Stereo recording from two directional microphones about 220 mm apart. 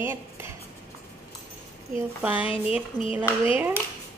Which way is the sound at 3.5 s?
10° right (ahead or behind).